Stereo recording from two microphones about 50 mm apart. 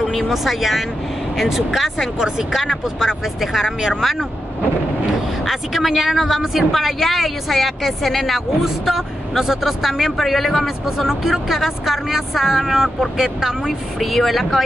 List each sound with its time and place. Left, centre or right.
0.0 s a woman's voice: centre
2.1 s speech: centre
5.5 s a woman's voice: centre